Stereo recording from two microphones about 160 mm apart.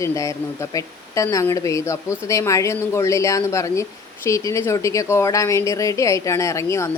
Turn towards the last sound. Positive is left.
turn(degrees=20)  # may be behind; listen again after turning